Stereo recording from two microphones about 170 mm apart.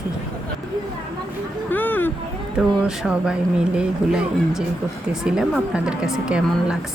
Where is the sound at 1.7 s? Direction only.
10° left (ahead or behind).